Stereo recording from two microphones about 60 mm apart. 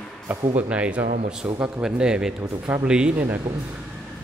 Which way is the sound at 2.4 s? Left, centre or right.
Right.